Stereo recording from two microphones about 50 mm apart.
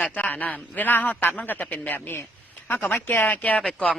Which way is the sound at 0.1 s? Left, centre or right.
Left.